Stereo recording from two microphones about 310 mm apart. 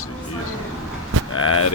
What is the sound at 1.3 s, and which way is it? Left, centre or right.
Speech, left.